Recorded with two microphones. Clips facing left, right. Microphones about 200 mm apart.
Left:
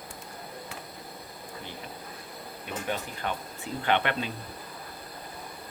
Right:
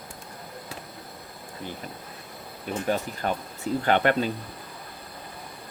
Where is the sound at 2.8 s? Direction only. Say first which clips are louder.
Right 6 dB; 40° right (ahead or behind).